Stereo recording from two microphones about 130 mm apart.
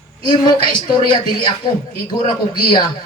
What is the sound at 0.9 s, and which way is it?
Speech, 35° left (ahead or behind).